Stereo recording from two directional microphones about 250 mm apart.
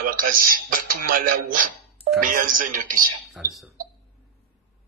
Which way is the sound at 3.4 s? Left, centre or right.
Centre.